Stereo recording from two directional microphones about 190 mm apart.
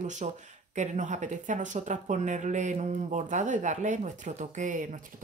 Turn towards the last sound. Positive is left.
turn(degrees=-45)  # may be behind; listen again after turning